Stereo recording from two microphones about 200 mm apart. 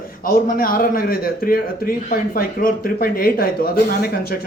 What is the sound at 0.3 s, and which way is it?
A man's voice, 45° left (ahead or behind).